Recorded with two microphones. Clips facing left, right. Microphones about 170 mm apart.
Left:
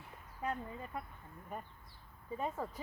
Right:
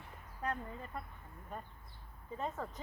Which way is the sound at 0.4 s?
10° left (ahead or behind).